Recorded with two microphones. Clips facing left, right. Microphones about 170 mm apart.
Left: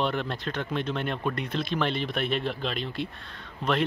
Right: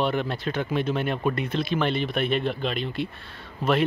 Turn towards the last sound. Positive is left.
turn(degrees=-5)  # may be behind; listen again after turning